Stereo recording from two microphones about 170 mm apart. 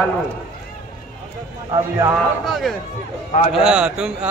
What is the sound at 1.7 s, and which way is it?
Speech, 20° right (ahead or behind).